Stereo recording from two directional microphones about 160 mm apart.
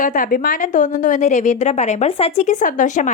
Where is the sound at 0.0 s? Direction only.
60° left (ahead or behind).